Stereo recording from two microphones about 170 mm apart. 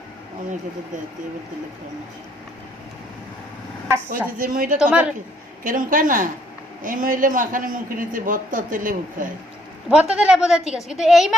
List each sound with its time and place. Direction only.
4.4 s a woman's voice: 55° right (ahead or behind)
4.8 s a woman's voice: 5° right (ahead or behind)
5.6 s a man's voice: 50° right (ahead or behind)
9.9 s a man's voice: 5° right (ahead or behind)